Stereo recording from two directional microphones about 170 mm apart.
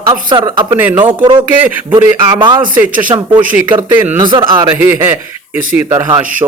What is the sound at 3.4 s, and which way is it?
Speech, 10° right (ahead or behind).